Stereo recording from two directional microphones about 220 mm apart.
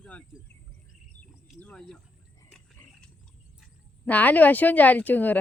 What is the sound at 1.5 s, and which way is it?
Speech, 5° left (ahead or behind).